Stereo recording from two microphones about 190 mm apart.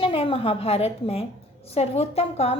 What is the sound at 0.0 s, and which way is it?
A woman's voice, 30° left (ahead or behind).